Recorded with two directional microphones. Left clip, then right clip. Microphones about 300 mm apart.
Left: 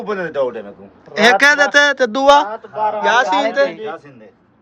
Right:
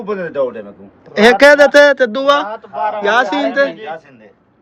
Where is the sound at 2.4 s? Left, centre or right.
Right.